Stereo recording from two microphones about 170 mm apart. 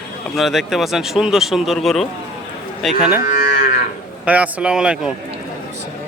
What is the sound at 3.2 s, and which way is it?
Moo, 50° left (ahead or behind).